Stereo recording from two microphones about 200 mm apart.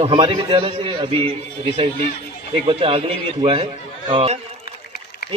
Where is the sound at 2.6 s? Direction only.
25° right (ahead or behind).